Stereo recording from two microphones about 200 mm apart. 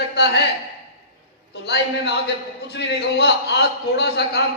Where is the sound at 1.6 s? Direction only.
55° left (ahead or behind).